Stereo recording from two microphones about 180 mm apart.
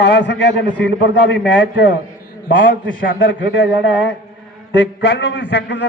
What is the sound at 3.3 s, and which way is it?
Speech, 85° left.